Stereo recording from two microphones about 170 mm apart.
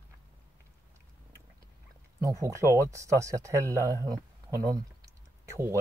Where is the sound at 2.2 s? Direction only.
20° right (ahead or behind).